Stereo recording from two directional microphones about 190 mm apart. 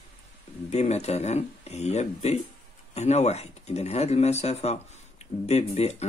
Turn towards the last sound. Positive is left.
turn(degrees=35)  # may be behind; listen again after turning